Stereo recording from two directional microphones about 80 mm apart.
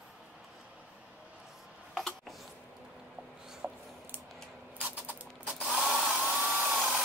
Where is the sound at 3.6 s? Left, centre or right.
Centre.